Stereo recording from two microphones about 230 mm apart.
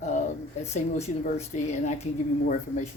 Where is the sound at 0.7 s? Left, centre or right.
Left.